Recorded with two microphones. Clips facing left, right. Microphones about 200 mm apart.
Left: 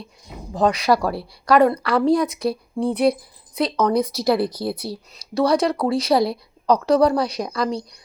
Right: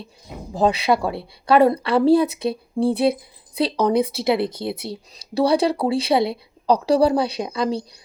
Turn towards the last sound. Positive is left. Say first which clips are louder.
# right 1 dB
turn(degrees=-30)  # may be behind; listen again after turning